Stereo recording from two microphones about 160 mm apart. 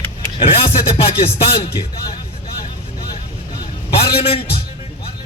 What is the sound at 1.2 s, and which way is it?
Speech, 40° left (ahead or behind).